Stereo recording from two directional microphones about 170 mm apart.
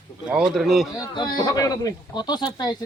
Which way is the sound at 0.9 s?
25° left (ahead or behind).